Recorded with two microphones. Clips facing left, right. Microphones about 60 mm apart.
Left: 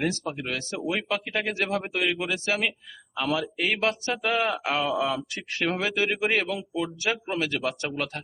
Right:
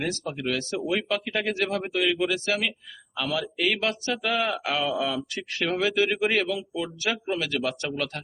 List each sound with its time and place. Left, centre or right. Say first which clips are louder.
0.0 s a man's voice: left 1 dB; left
3.7 s speech: left 1 dB; left